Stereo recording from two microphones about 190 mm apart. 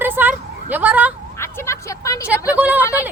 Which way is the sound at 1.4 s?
15° left (ahead or behind).